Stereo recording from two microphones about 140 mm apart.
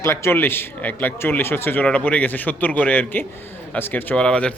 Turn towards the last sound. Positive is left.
turn(degrees=5)  # may be behind; listen again after turning